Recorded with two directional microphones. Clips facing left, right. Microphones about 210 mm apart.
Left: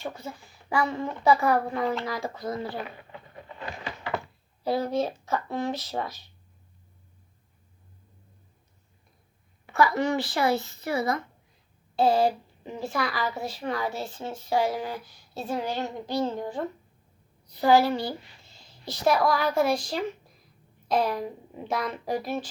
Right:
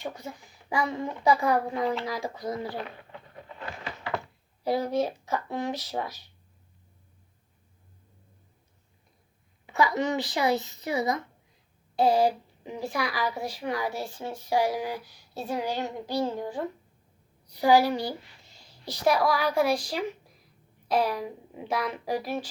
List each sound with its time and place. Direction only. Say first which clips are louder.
0.0 s a woman's voice: left 1 dB; 15° right (ahead or behind)
2.7 s a sound: left 1 dB; 5° left (ahead or behind)
4.6 s a woman's voice: even; 15° right (ahead or behind)
9.6 s a woman's voice: left 2 dB; 20° right (ahead or behind)
18.6 s a sound: left 1 dB; 15° right (ahead or behind)
19.0 s a woman's voice: left 1 dB; 10° right (ahead or behind)